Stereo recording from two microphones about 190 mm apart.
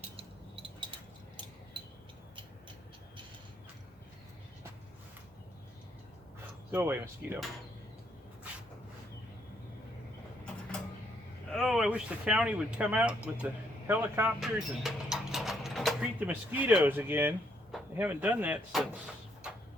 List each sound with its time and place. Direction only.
0.2 s a sound: 25° right (ahead or behind)
6.7 s speech: 10° right (ahead or behind)
11.5 s speech: centre (ahead or behind)